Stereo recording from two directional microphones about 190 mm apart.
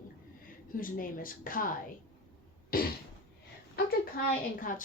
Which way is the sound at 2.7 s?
50° left (ahead or behind).